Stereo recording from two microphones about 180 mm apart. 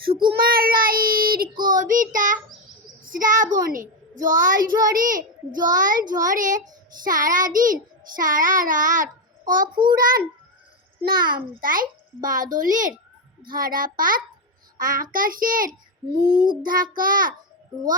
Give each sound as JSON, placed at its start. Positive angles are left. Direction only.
{"t": 0.1, "sound": "child singing", "side_deg": -25}
{"t": 0.3, "sound": "child singing", "side_deg": -55}
{"t": 5.0, "sound": "a child's voice", "side_deg": -50}
{"t": 5.6, "sound": "child singing", "side_deg": -45}
{"t": 11.0, "sound": "a child's voice", "side_deg": -55}
{"t": 11.6, "sound": "child singing", "side_deg": -50}